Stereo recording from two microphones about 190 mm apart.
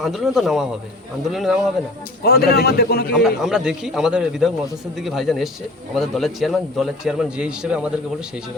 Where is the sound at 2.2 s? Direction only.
55° left (ahead or behind).